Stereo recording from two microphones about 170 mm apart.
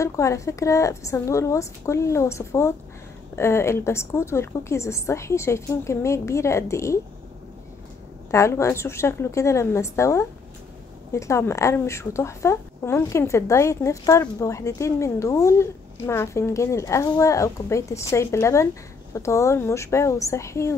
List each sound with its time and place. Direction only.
0.0 s speech: 15° left (ahead or behind)
8.3 s speech: 15° left (ahead or behind)